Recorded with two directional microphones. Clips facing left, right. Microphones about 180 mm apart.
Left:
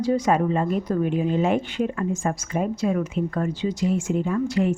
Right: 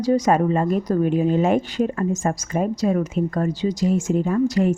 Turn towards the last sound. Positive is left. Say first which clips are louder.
# right 3 dB
turn(degrees=-40)  # may be behind; listen again after turning